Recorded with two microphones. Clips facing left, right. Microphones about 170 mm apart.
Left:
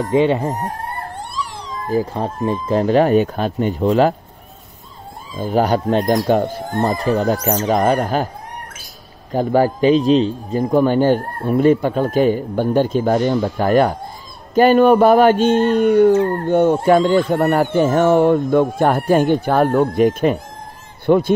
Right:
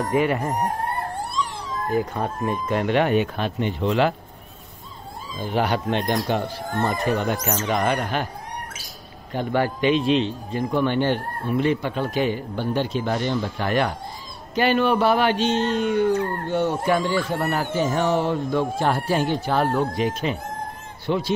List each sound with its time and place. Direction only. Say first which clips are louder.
0.1 s speech: left 7 dB; 25° left (ahead or behind)
1.9 s speech: left 5 dB; 30° left (ahead or behind)
5.4 s speech: left 6 dB; 40° left (ahead or behind)
9.3 s a man's voice: left 7 dB; 40° left (ahead or behind)